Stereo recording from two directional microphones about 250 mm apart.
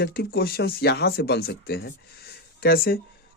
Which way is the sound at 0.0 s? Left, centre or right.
Left.